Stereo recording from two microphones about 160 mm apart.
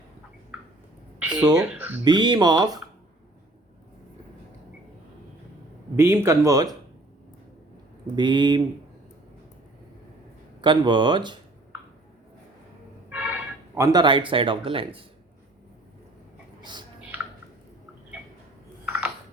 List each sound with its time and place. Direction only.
1.3 s speech: 25° right (ahead or behind)
6.0 s speech: 15° right (ahead or behind)
8.0 s speech: 25° right (ahead or behind)
10.6 s speech: 30° right (ahead or behind)
13.1 s a sound: 10° right (ahead or behind)
13.7 s speech: 20° right (ahead or behind)